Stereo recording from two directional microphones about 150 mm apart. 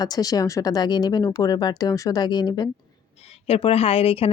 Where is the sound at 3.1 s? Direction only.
45° left (ahead or behind).